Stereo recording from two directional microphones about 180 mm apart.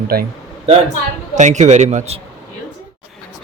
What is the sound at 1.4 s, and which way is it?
Speech, 40° right (ahead or behind).